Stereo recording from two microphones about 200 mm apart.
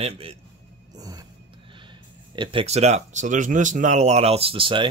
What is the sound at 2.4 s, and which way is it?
Speech, 25° right (ahead or behind).